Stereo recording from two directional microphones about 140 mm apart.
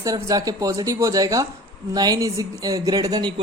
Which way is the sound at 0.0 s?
25° right (ahead or behind).